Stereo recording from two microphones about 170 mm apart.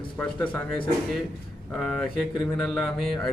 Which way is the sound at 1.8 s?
5° left (ahead or behind).